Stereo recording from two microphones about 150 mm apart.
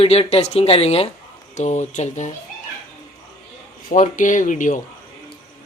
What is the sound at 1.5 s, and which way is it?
Speech, 55° left (ahead or behind).